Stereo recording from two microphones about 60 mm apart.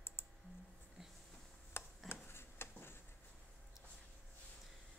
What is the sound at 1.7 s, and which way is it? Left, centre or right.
Tick-tock, left.